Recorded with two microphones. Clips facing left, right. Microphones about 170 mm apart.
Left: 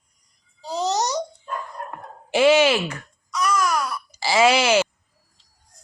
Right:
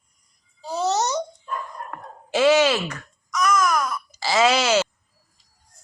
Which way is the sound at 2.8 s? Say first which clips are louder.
Left 1 dB; 30° left (ahead or behind).